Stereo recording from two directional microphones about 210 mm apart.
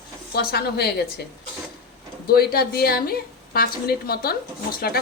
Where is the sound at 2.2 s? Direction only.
45° left (ahead or behind).